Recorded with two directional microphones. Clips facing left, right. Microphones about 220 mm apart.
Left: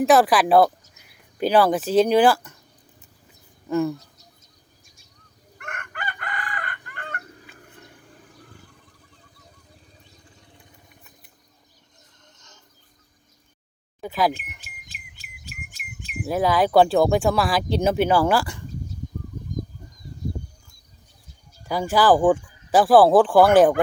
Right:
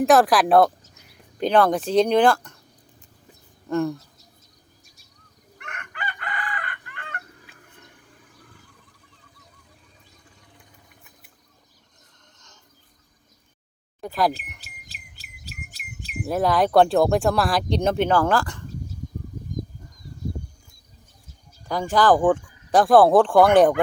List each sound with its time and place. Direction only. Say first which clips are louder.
0.0 s speech: even; centre (ahead or behind)
3.7 s speech: left 1 dB; 5° left (ahead or behind)
5.5 s chicken: left 2 dB; 45° left (ahead or behind)
7.5 s water: left 4 dB; centre (ahead or behind)
14.0 s speech: even; centre (ahead or behind)
14.6 s bird: even; 35° right (ahead or behind)
16.2 s speech: even; centre (ahead or behind)
21.7 s speech: left 1 dB; 5° left (ahead or behind)